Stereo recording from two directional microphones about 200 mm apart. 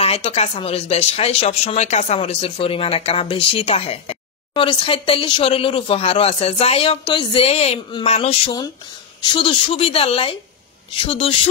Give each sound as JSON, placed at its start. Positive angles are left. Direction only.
{"t": 0.0, "sound": "speech", "side_deg": 30}